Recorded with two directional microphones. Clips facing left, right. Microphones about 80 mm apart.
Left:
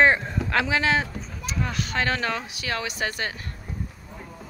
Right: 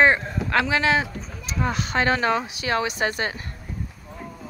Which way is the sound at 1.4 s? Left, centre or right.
Right.